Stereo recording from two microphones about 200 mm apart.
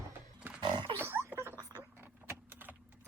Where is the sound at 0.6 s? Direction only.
25° right (ahead or behind).